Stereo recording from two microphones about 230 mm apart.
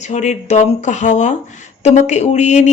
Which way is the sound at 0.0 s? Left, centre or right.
Left.